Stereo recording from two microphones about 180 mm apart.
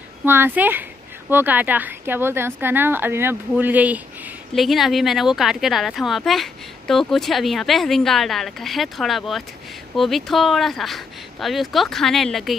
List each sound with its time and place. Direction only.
0.2 s a woman's voice: 10° right (ahead or behind)